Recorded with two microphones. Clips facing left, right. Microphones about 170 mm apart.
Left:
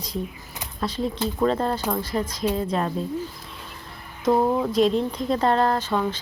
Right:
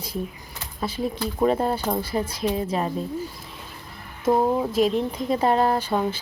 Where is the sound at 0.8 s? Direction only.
10° right (ahead or behind).